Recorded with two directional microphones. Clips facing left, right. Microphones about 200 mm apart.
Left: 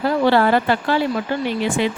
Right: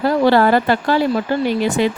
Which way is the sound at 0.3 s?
40° right (ahead or behind).